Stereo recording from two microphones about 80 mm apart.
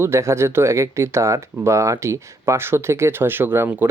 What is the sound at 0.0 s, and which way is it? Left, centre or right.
Speech, right.